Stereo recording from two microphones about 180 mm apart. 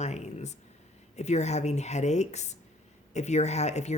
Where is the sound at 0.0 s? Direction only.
40° left (ahead or behind).